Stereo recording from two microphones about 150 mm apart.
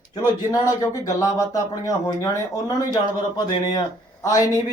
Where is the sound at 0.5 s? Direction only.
25° left (ahead or behind).